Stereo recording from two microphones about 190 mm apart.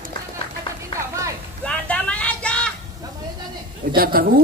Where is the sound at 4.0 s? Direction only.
50° right (ahead or behind).